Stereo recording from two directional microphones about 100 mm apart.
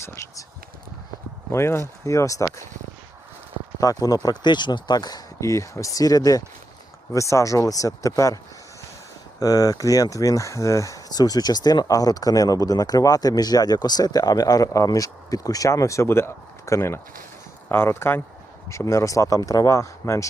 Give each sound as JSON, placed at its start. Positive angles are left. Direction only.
{"t": 0.0, "sound": "speech", "side_deg": 25}
{"t": 1.5, "sound": "speech", "side_deg": 25}
{"t": 3.8, "sound": "speech", "side_deg": 40}
{"t": 9.4, "sound": "speech", "side_deg": 40}